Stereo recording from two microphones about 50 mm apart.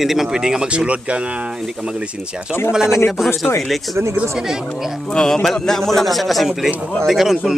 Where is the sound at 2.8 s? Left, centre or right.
Left.